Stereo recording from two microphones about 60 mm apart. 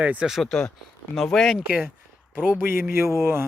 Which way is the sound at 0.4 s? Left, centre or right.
Centre.